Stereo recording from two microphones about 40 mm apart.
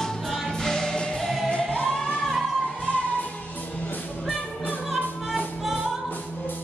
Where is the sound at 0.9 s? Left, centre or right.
Left.